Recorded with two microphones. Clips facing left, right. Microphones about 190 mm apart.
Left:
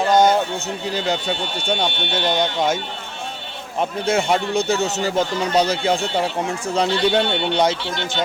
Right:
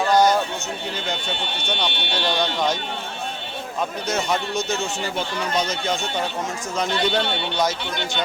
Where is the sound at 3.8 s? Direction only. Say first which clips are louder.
Left 5 dB; 25° left (ahead or behind).